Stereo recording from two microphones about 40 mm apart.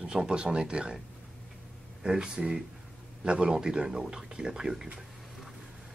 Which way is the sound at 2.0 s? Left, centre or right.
Centre.